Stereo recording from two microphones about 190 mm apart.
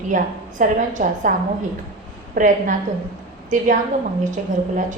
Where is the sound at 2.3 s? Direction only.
40° right (ahead or behind).